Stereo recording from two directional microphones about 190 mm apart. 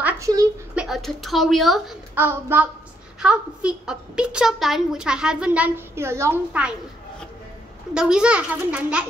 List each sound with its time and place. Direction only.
0.0 s a sound: 15° right (ahead or behind)
0.7 s speech: centre (ahead or behind)
2.1 s a woman's voice: 10° right (ahead or behind)
7.9 s a woman's voice: 5° right (ahead or behind)